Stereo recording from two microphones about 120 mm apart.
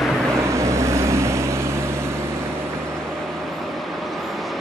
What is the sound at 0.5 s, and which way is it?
Vehicle, 25° right (ahead or behind).